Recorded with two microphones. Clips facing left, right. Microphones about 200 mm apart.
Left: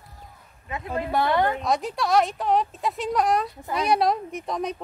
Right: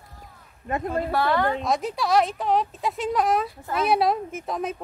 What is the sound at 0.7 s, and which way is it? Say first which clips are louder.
Speech: right 4 dB; 50° right (ahead or behind).